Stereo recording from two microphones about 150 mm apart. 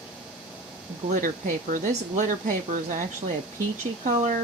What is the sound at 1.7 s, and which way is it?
Speech, 60° right (ahead or behind).